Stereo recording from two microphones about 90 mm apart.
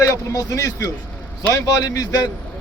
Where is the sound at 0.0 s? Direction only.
35° left (ahead or behind).